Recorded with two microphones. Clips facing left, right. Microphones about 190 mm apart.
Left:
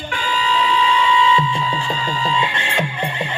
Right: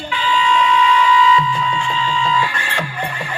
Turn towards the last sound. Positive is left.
turn(degrees=25)  # may be behind; listen again after turning